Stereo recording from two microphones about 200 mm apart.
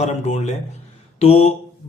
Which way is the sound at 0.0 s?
35° left (ahead or behind).